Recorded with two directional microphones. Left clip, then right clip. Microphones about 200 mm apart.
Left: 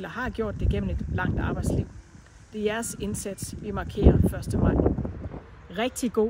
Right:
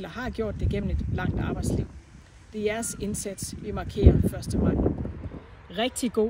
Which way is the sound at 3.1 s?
30° left (ahead or behind).